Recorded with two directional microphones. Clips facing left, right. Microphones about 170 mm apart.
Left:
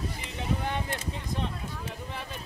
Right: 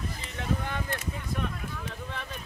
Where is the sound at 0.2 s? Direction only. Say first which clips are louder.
Even; 20° left (ahead or behind).